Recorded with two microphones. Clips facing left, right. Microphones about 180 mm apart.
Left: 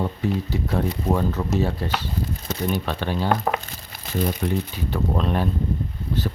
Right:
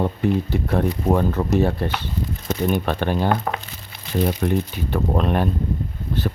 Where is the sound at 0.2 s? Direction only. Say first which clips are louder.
Right 4 dB; 55° right (ahead or behind).